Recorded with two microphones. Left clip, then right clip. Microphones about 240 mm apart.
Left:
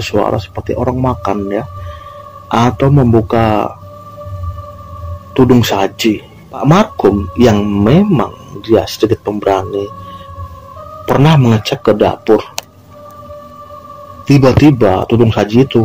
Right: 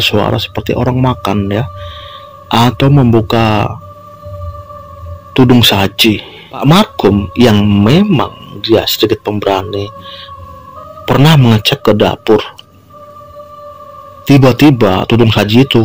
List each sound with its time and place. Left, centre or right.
0.0 s speech: right
5.3 s speech: right
11.1 s speech: right
14.2 s speech: right